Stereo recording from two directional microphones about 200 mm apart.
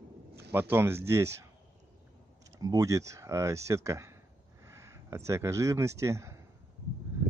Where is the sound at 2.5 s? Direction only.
15° right (ahead or behind).